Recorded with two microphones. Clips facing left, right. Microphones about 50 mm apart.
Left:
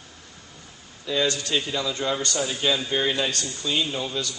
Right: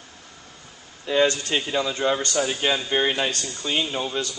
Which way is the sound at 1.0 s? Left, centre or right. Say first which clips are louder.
Right 4 dB; right.